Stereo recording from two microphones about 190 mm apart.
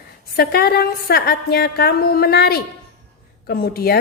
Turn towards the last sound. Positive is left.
turn(degrees=55)  # may be behind; listen again after turning